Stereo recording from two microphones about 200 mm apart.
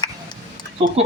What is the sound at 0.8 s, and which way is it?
Speech, 30° right (ahead or behind).